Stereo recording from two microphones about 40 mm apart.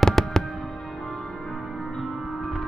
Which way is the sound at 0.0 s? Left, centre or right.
Centre.